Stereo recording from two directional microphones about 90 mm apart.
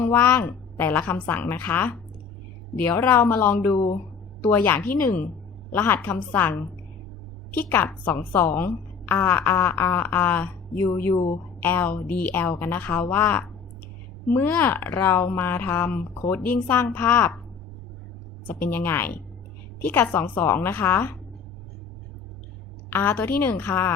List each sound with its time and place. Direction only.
0.0 s a woman's voice: 25° left (ahead or behind)
18.4 s a woman's voice: 20° left (ahead or behind)
22.9 s a woman's voice: 20° left (ahead or behind)